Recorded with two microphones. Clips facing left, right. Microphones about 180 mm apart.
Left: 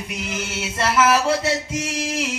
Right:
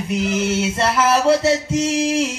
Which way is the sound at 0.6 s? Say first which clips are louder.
Right 2 dB; 30° right (ahead or behind).